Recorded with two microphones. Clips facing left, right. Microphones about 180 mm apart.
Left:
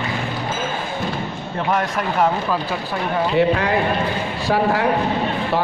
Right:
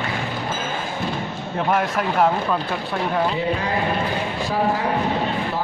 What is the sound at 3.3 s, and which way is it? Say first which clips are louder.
A man's voice: left 6 dB; 70° left (ahead or behind).